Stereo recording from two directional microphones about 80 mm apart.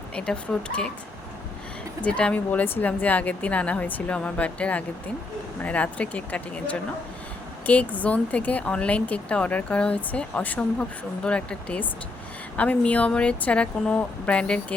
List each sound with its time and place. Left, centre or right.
0.1 s speech: centre
2.0 s speech: centre